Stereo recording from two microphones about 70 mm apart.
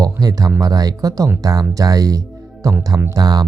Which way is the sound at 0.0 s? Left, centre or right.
Right.